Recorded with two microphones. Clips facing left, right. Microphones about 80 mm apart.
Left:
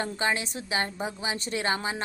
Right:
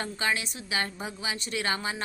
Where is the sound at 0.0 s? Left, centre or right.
Left.